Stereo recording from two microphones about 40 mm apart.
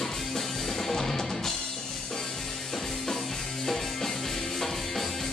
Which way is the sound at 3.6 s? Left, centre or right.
Centre.